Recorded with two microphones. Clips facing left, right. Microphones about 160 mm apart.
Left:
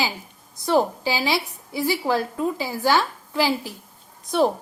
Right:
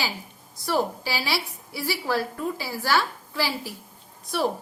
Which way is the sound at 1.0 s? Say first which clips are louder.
Left 5 dB; 20° left (ahead or behind).